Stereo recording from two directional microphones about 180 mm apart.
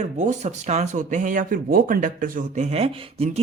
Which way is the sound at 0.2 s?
40° right (ahead or behind).